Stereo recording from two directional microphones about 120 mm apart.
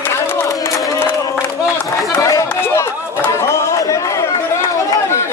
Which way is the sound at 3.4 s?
25° left (ahead or behind).